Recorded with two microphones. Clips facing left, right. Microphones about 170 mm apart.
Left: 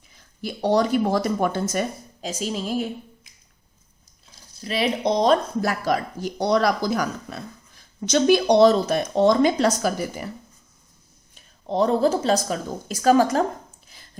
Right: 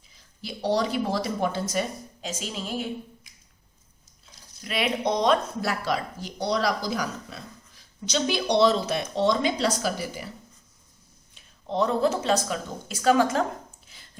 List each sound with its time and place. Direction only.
0.2 s a woman's voice: 50° left (ahead or behind)
4.6 s speech: 35° left (ahead or behind); by 10.3 s 50° left (ahead or behind)
11.3 s a woman's voice: 40° left (ahead or behind)
13.8 s a sound: 40° left (ahead or behind)